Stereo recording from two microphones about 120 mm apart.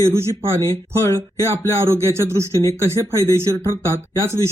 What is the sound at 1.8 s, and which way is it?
Speech, 25° right (ahead or behind).